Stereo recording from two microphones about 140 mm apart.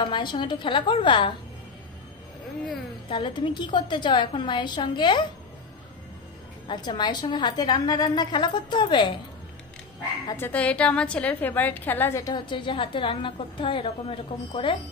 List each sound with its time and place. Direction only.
0.0 s a woman's voice: 35° left (ahead or behind)
3.1 s a woman's voice: 35° left (ahead or behind)
6.7 s a woman's voice: 30° left (ahead or behind)
10.2 s a woman's voice: 15° left (ahead or behind); by 14.8 s 35° left (ahead or behind)